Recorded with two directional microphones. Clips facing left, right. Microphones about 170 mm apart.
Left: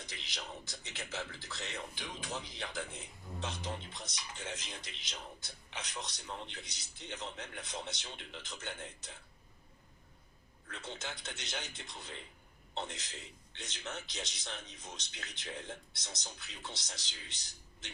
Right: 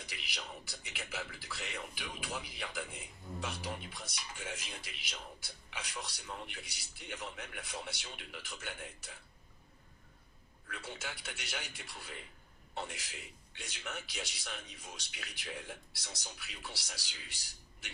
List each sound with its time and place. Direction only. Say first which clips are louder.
0.0 s a man's voice: even; 20° left (ahead or behind)
10.7 s a man's voice: even; 20° left (ahead or behind)